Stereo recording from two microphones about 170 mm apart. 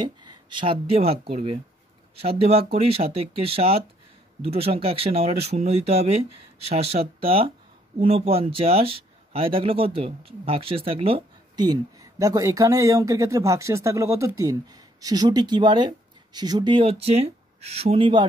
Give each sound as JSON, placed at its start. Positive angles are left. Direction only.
{"t": 0.0, "sound": "speech", "side_deg": -25}